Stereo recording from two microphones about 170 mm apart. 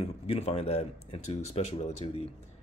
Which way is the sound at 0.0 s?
35° left (ahead or behind).